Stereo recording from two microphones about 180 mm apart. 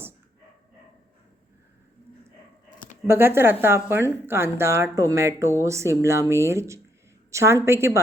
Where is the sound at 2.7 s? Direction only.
45° left (ahead or behind).